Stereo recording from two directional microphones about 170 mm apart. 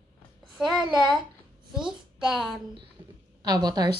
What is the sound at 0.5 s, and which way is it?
Speech, centre (ahead or behind).